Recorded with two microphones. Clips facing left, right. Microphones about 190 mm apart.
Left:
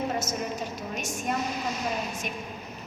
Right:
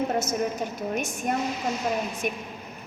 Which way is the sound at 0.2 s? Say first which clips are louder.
Right 4 dB; 55° right (ahead or behind).